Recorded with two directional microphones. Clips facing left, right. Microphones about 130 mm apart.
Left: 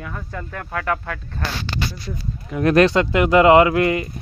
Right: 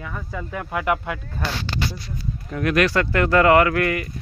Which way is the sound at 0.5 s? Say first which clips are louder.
Right 1 dB; 15° right (ahead or behind).